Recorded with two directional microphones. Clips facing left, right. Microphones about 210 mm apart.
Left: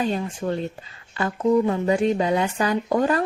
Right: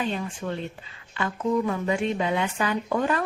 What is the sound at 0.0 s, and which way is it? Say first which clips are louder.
Speech: left 4 dB; 40° left (ahead or behind).